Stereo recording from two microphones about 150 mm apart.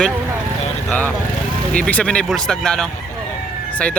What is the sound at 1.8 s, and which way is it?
A man's voice, 10° left (ahead or behind).